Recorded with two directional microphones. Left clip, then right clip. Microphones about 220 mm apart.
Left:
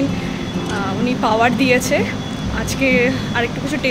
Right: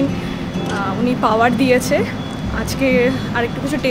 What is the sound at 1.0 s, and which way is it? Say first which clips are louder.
Speech: right 1 dB; 10° right (ahead or behind).